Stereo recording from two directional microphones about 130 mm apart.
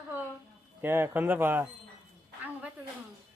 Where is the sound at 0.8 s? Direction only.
15° right (ahead or behind).